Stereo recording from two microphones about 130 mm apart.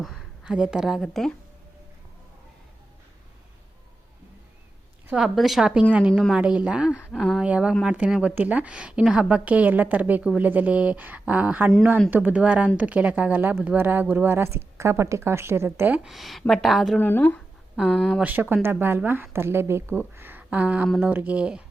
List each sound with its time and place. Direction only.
0.0 s a woman's voice: centre (ahead or behind)
5.0 s speech: 5° right (ahead or behind)
16.0 s a woman's voice: centre (ahead or behind)
17.0 s speech: 15° left (ahead or behind)
17.7 s a woman's voice: centre (ahead or behind)
18.2 s speech: 15° right (ahead or behind)